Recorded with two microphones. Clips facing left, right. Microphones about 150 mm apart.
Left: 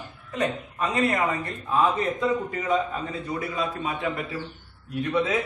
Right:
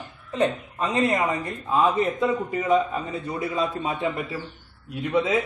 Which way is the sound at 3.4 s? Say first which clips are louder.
Right 5 dB; 25° right (ahead or behind).